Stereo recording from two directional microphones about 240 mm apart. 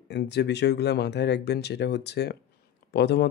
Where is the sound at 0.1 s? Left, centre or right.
Left.